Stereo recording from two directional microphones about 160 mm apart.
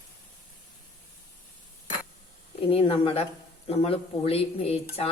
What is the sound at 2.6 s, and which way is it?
Speech, 35° left (ahead or behind).